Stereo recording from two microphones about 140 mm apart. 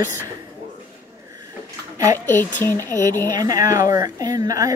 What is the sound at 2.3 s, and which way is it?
Speech, 15° left (ahead or behind).